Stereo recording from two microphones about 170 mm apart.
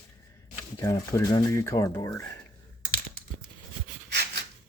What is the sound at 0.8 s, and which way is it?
Speech, 20° left (ahead or behind).